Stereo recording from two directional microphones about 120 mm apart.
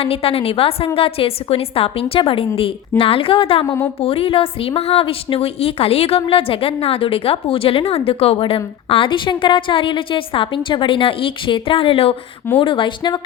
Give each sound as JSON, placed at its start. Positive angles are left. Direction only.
{"t": 0.0, "sound": "a woman's voice", "side_deg": 50}